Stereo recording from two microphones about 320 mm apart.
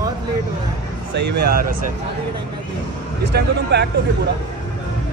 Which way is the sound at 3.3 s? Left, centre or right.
Right.